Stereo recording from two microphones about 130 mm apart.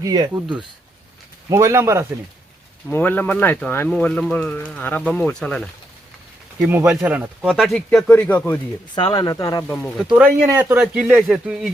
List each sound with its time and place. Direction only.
0.0 s speech: 30° right (ahead or behind)
1.5 s speech: 20° right (ahead or behind)
2.9 s speech: 15° left (ahead or behind)
6.6 s speech: 15° right (ahead or behind)
7.5 s speech: centre (ahead or behind)
7.9 s speech: 10° left (ahead or behind)
9.0 s speech: 30° left (ahead or behind)
10.2 s speech: 15° right (ahead or behind)